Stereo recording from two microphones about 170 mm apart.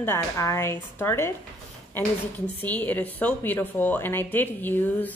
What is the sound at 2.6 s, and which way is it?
A woman's voice, 10° left (ahead or behind).